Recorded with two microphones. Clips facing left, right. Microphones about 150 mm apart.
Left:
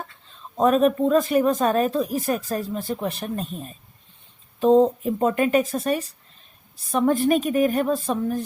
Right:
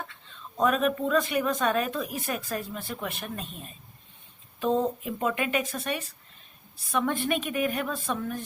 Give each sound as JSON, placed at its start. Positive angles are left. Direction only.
{"t": 0.1, "sound": "speech", "side_deg": 40}